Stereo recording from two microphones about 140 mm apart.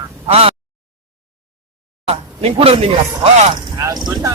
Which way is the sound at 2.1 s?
45° right (ahead or behind).